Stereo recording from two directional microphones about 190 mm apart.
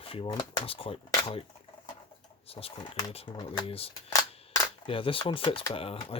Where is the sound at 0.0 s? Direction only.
30° left (ahead or behind).